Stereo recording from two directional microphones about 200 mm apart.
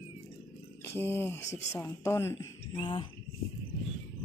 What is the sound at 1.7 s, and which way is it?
Speech, 15° left (ahead or behind).